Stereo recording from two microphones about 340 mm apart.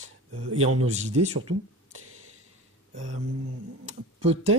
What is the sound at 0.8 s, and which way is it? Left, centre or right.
Speech, centre.